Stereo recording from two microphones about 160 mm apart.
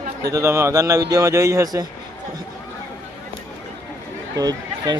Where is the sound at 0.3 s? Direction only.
20° right (ahead or behind).